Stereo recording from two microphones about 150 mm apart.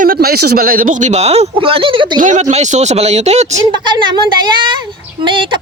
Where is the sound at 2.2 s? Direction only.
55° right (ahead or behind).